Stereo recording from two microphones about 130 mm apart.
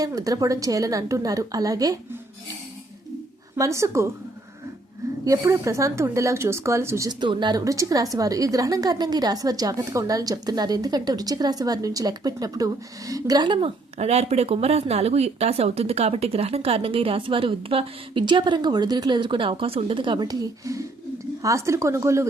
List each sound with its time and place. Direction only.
0.0 s a woman's voice: 30° right (ahead or behind)
3.6 s a woman's voice: 25° right (ahead or behind)
5.2 s a woman's voice: 25° right (ahead or behind)
7.1 s a woman's voice: 35° right (ahead or behind)
14.0 s a woman's voice: 55° right (ahead or behind); by 22.3 s 20° right (ahead or behind)